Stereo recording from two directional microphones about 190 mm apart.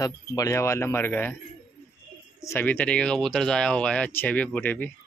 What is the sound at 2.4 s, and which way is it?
Speech, 10° left (ahead or behind).